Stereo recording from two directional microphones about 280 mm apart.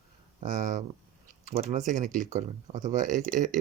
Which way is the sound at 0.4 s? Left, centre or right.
Right.